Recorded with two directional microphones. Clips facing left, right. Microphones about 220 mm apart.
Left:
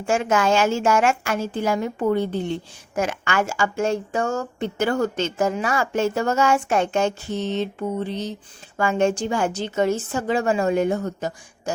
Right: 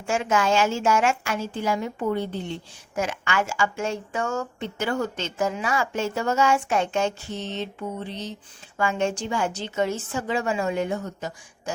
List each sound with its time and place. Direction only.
0.0 s a woman's voice: 45° left (ahead or behind)